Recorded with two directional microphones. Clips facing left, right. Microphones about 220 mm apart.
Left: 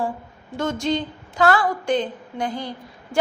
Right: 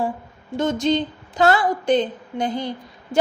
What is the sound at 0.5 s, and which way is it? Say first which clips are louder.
A woman's voice: right 3 dB; 20° right (ahead or behind).